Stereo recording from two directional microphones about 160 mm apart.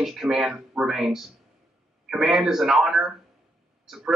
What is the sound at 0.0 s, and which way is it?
Speech, centre (ahead or behind).